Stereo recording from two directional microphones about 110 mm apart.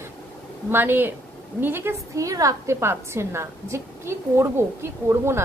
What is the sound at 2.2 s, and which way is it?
A woman's voice, 30° right (ahead or behind).